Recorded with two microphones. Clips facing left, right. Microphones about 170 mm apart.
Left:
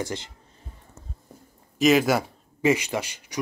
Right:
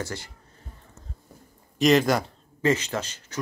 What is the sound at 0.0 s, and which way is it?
Speech, 20° left (ahead or behind).